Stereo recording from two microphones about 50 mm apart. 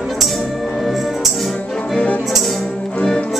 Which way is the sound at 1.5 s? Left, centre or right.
Centre.